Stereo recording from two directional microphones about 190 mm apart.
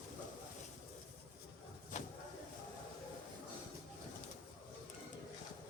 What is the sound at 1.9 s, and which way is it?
Vehicle, 40° left (ahead or behind).